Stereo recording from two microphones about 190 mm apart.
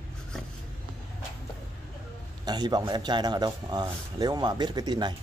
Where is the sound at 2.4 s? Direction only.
20° right (ahead or behind).